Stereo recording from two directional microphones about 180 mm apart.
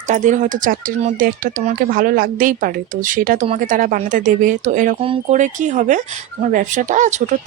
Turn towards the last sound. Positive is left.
turn(degrees=-40)  # may be behind; listen again after turning